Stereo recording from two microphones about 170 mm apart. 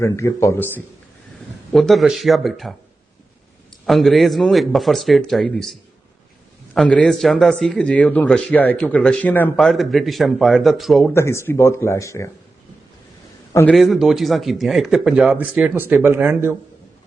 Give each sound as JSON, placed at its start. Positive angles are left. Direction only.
{"t": 0.0, "sound": "speech", "side_deg": 15}
{"t": 1.7, "sound": "speech", "side_deg": 0}
{"t": 3.8, "sound": "speech", "side_deg": 0}
{"t": 6.7, "sound": "speech", "side_deg": 5}
{"t": 11.1, "sound": "speech", "side_deg": 15}
{"t": 13.5, "sound": "a man's voice", "side_deg": 15}
{"t": 13.7, "sound": "speech", "side_deg": 0}